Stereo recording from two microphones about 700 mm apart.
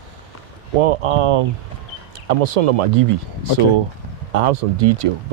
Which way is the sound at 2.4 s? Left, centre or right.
Right.